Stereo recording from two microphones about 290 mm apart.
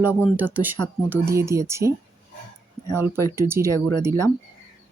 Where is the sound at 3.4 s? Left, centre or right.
Centre.